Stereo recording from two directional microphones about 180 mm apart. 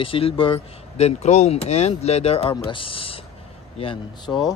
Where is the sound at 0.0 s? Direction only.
30° left (ahead or behind).